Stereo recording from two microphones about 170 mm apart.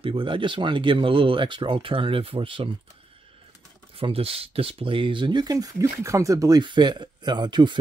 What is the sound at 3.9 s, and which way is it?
Speech, 35° right (ahead or behind).